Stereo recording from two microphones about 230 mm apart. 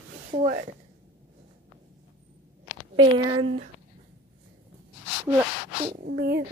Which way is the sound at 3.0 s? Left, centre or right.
Right.